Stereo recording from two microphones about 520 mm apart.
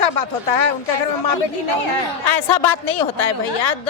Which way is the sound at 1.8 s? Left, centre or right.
Left.